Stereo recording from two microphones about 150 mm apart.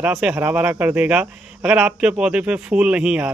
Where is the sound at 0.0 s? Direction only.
5° right (ahead or behind).